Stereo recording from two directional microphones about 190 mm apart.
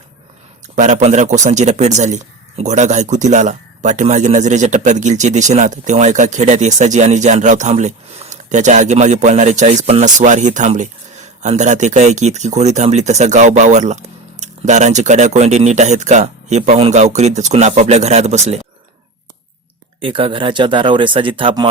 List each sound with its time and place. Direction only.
0.8 s a man's voice: 40° right (ahead or behind)
20.0 s speech: 30° right (ahead or behind)